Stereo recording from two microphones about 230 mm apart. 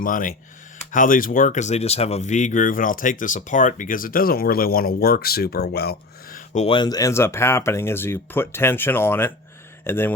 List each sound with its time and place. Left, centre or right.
0.0 s speech: left; by 10.1 s centre